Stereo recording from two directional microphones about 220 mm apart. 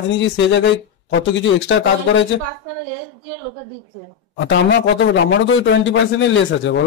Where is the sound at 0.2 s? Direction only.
55° left (ahead or behind).